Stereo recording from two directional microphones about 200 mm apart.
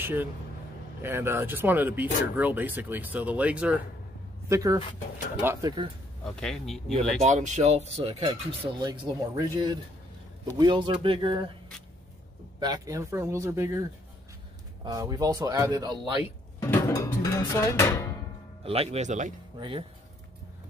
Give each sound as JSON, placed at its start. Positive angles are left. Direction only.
{"t": 0.0, "sound": "speech", "side_deg": -10}
{"t": 6.2, "sound": "speech", "side_deg": 0}
{"t": 7.2, "sound": "speech", "side_deg": -35}
{"t": 12.5, "sound": "speech", "side_deg": -20}
{"t": 14.9, "sound": "speech", "side_deg": -20}
{"t": 16.5, "sound": "music", "side_deg": 15}
{"t": 18.6, "sound": "speech", "side_deg": -30}